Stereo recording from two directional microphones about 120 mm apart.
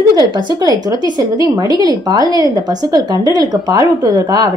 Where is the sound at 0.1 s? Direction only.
35° right (ahead or behind).